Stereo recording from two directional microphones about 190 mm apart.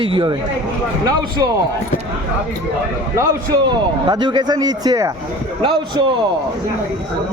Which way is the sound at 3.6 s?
25° right (ahead or behind).